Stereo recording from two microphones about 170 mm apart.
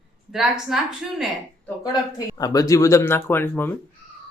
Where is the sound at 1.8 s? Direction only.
20° left (ahead or behind).